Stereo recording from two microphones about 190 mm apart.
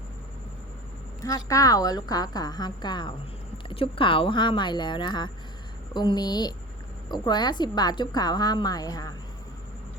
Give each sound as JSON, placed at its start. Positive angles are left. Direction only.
{"t": 1.2, "sound": "a woman's voice", "side_deg": 15}